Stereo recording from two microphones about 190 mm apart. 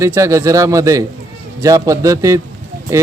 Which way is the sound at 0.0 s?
15° right (ahead or behind).